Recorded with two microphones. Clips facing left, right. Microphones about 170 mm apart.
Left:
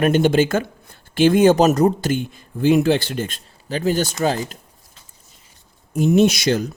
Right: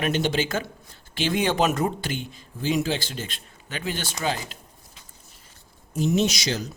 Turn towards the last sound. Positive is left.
turn(degrees=55)  # may be behind; listen again after turning